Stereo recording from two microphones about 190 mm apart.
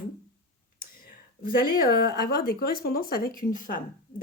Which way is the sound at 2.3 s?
50° left (ahead or behind).